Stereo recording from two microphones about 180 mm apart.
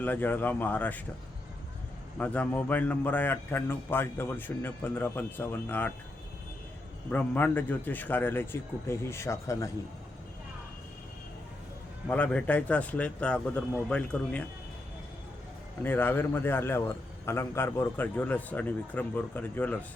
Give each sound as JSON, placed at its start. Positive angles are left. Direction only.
{"t": 0.0, "sound": "a man's voice", "side_deg": 10}
{"t": 2.1, "sound": "a man's voice", "side_deg": 10}
{"t": 7.1, "sound": "a man's voice", "side_deg": 10}
{"t": 12.0, "sound": "a man's voice", "side_deg": 10}
{"t": 15.8, "sound": "a man's voice", "side_deg": 10}